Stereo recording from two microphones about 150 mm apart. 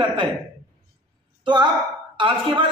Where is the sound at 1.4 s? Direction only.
30° right (ahead or behind).